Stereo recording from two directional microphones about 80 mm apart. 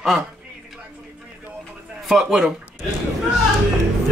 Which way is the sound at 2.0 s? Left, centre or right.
Centre.